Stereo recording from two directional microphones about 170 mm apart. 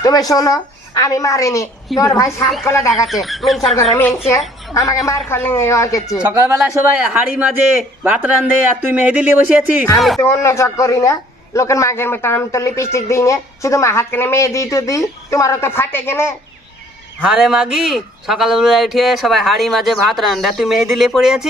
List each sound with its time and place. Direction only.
0.0 s a woman's voice: 20° left (ahead or behind)
3.1 s speech: centre (ahead or behind)
4.7 s a man's voice: 20° left (ahead or behind)
6.7 s a man's voice: 5° right (ahead or behind)
9.9 s speech: centre (ahead or behind)
10.2 s a man's voice: 15° left (ahead or behind)
17.2 s speech: 5° right (ahead or behind)